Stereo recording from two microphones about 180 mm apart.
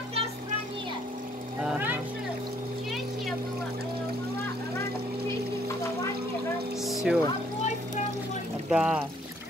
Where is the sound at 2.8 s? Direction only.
Centre (ahead or behind).